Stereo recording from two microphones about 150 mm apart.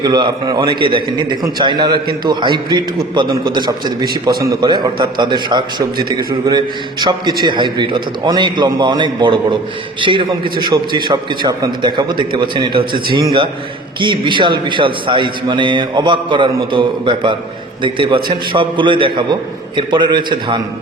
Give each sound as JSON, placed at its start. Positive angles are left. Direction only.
{"t": 0.0, "sound": "a man's voice", "side_deg": -30}